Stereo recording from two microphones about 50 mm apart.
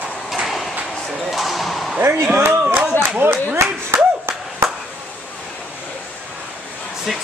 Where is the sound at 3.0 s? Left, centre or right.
Right.